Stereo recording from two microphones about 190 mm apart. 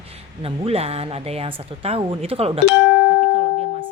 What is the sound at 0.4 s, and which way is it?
Speech, 30° right (ahead or behind).